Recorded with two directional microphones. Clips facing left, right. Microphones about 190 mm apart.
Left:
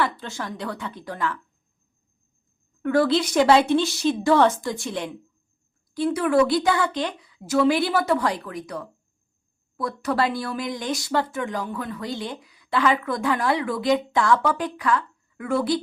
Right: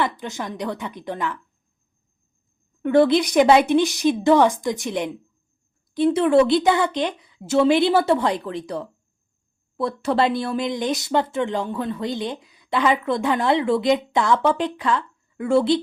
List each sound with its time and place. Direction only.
0.0 s speech: 15° right (ahead or behind)
2.8 s speech: 20° right (ahead or behind)